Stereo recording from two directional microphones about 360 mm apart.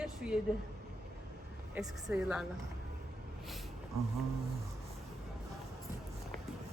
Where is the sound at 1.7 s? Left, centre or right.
Centre.